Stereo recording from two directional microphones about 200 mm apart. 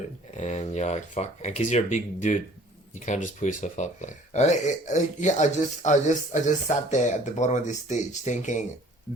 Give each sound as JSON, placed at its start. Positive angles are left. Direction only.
{"t": 0.3, "sound": "speech", "side_deg": 35}